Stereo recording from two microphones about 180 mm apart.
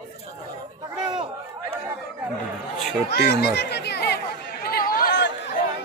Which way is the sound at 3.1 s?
70° left (ahead or behind).